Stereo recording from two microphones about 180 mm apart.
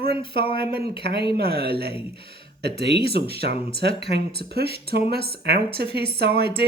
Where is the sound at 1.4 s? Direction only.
60° right (ahead or behind).